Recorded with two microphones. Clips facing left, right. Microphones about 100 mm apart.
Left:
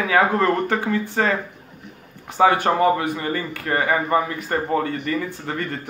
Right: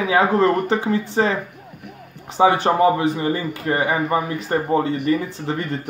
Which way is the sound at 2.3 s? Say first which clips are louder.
Right 1 dB; 20° right (ahead or behind).